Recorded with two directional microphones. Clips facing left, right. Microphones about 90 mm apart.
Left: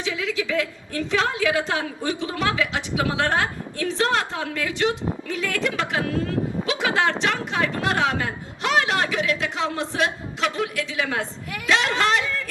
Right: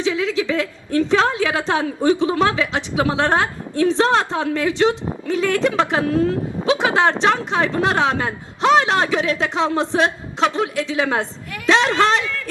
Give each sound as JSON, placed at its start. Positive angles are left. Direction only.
{"t": 0.0, "sound": "a woman's voice", "side_deg": -30}